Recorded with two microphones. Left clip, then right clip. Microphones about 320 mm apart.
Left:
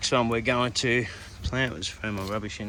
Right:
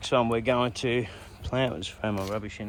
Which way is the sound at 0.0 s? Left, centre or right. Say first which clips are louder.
Even; centre.